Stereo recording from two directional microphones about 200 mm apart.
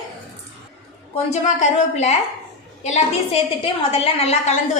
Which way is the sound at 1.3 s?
35° left (ahead or behind).